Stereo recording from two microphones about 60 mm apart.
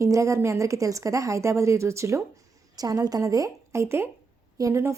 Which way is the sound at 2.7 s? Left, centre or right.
Right.